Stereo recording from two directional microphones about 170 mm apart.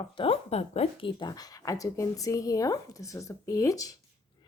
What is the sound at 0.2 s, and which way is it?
A woman's voice, 35° left (ahead or behind).